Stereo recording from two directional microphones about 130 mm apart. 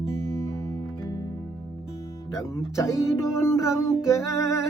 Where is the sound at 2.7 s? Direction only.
20° left (ahead or behind).